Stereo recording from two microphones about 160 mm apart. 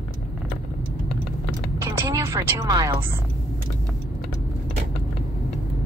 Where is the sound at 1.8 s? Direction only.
15° right (ahead or behind).